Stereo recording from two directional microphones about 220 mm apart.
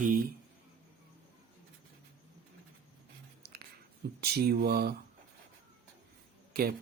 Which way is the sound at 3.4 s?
45° right (ahead or behind).